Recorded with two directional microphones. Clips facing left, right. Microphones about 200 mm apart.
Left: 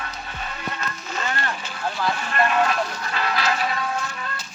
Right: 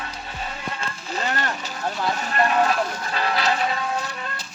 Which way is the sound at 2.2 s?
35° right (ahead or behind).